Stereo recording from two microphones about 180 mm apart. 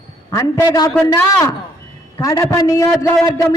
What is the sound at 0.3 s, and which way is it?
A man's voice, 20° left (ahead or behind).